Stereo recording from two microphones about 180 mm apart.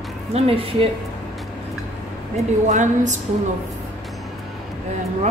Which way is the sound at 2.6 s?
45° right (ahead or behind).